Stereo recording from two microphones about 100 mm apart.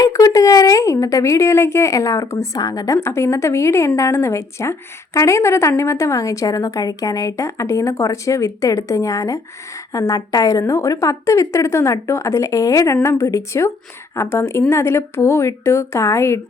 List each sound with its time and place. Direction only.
0.0 s a woman's voice: 35° left (ahead or behind)